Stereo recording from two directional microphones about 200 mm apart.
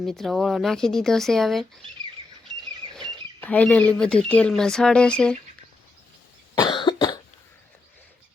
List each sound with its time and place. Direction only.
0.0 s speech: centre (ahead or behind)
2.9 s speech: 5° left (ahead or behind)
6.6 s cough: 25° left (ahead or behind)